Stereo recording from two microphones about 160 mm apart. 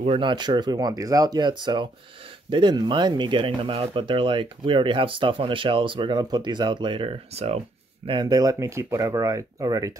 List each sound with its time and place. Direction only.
0.0 s speech: 35° right (ahead or behind)
8.1 s speech: 25° right (ahead or behind)